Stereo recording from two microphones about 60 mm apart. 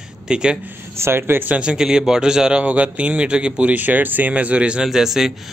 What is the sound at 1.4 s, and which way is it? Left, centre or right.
A man's voice, centre.